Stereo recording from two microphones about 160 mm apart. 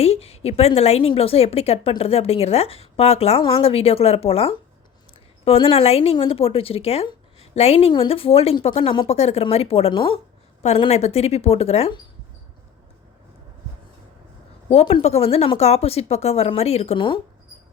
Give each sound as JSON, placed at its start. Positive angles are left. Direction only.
{"t": 0.0, "sound": "a woman's voice", "side_deg": 40}
{"t": 14.7, "sound": "a woman's voice", "side_deg": 40}